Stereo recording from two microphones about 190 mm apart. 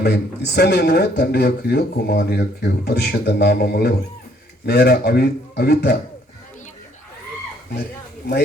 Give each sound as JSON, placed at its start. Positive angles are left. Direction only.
{"t": 0.0, "sound": "speech", "side_deg": 60}